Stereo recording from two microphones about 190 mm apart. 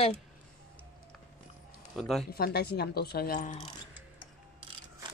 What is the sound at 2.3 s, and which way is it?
A woman's voice, 55° left (ahead or behind).